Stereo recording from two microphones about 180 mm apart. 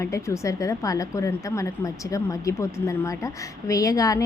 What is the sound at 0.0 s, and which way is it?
Speech, 15° left (ahead or behind).